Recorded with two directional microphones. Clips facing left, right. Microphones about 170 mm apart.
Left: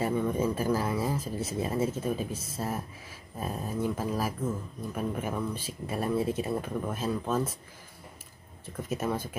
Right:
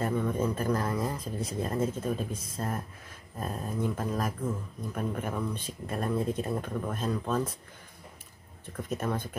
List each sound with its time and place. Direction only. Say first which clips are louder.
0.0 s speech: left 1 dB; 10° left (ahead or behind)
8.7 s speech: left 1 dB; 5° left (ahead or behind)